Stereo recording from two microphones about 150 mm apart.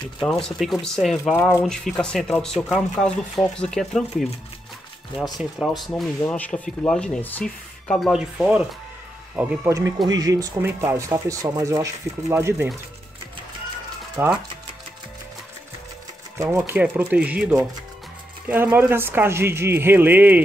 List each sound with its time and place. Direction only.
0.6 s speech: centre (ahead or behind)
6.2 s speech: 10° left (ahead or behind); by 12.6 s 20° right (ahead or behind)
14.2 s speech: 15° right (ahead or behind)
16.3 s speech: 15° right (ahead or behind)